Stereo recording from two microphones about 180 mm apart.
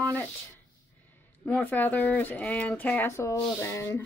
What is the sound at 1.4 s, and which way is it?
Speech, 10° left (ahead or behind).